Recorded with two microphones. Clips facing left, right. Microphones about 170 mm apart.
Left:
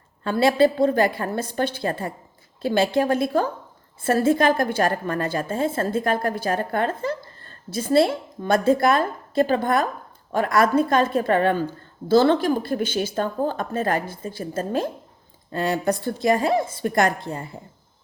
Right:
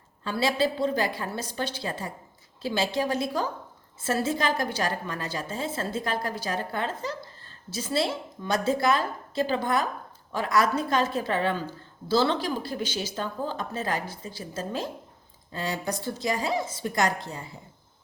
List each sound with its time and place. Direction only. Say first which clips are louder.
0.3 s a woman's voice: left 8 dB; 55° left (ahead or behind)